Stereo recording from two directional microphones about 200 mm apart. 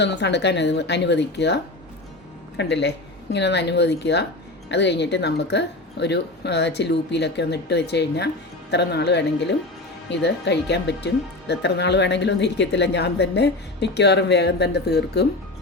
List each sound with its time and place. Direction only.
0.0 s speech: 60° left (ahead or behind)